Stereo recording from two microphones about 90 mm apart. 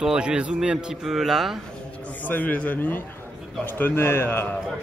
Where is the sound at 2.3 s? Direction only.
20° left (ahead or behind).